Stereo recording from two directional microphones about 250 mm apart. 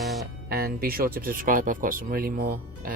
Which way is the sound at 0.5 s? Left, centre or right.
Right.